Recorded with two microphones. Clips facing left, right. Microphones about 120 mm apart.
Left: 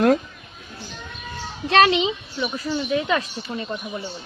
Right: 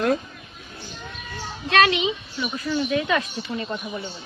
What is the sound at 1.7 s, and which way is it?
Speech, 30° left (ahead or behind).